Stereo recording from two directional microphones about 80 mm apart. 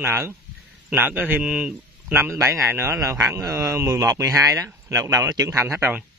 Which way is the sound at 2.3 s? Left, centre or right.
Right.